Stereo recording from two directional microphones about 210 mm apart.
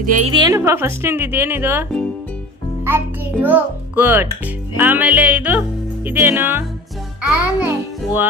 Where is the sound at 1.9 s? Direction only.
5° left (ahead or behind).